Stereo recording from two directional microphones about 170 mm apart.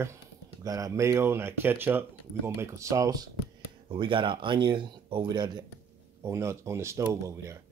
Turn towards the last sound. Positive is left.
turn(degrees=-20)  # may be behind; listen again after turning